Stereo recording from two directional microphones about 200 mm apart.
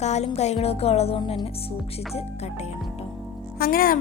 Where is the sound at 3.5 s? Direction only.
45° left (ahead or behind).